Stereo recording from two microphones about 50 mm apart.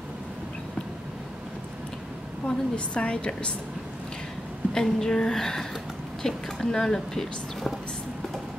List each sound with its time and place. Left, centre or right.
2.4 s a woman's voice: left
4.7 s speech: centre